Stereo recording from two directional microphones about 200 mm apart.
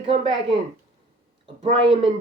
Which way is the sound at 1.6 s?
30° right (ahead or behind).